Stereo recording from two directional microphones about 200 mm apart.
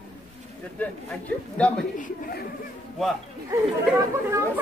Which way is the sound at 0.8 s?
5° left (ahead or behind).